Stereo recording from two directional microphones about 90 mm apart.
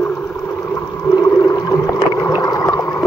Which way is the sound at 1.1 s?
40° left (ahead or behind).